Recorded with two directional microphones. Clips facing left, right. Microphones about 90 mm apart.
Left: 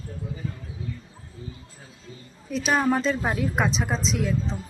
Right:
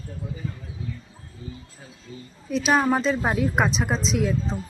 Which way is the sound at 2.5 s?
10° right (ahead or behind).